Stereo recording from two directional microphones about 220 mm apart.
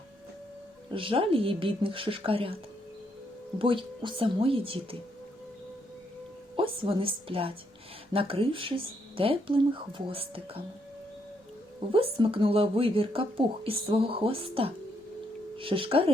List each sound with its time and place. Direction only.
0.9 s speech: 25° right (ahead or behind)
3.6 s speech: 25° right (ahead or behind)
6.6 s speech: 25° right (ahead or behind)
11.9 s speech: 25° right (ahead or behind)